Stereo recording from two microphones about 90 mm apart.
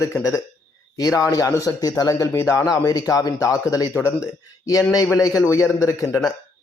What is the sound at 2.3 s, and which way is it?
Speech, 30° left (ahead or behind).